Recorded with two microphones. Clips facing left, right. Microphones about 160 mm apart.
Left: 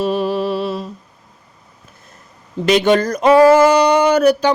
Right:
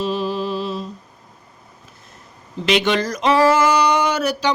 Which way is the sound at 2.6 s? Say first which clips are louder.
Left 5 dB; 45° left (ahead or behind).